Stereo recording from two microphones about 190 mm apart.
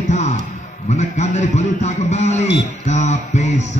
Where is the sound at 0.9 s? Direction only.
40° left (ahead or behind).